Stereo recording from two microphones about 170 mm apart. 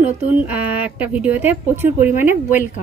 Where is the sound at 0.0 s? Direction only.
10° right (ahead or behind).